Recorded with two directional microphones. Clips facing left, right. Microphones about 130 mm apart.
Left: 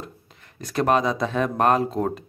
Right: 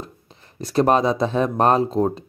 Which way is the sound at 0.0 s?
30° right (ahead or behind).